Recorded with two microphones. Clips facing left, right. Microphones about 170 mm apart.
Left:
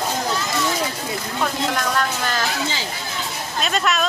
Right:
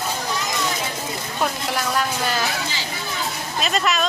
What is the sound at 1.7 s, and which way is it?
Speech, 10° right (ahead or behind).